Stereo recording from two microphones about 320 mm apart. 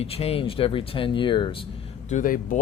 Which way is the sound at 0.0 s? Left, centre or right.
Centre.